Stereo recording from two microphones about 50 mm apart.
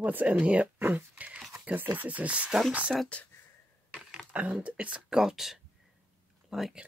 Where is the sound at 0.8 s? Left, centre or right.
Right.